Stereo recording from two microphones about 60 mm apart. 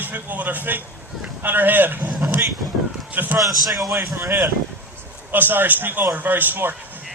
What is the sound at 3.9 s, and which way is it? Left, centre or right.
Speech, right.